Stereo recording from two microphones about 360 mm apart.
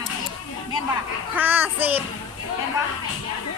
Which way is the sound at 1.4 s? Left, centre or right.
Centre.